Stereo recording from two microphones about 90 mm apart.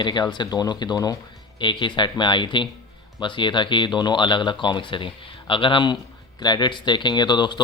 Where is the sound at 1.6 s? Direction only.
60° left (ahead or behind).